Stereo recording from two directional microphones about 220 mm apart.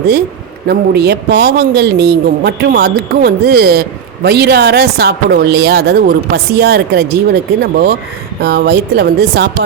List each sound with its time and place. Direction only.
0.7 s speech: 45° right (ahead or behind)